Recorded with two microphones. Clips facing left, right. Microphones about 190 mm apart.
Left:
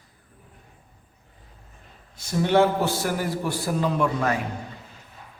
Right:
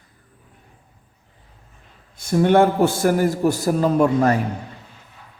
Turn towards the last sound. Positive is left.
turn(degrees=-45)  # may be behind; listen again after turning